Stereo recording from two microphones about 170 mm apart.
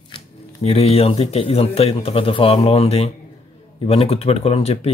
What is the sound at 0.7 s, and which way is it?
Speech, 35° left (ahead or behind).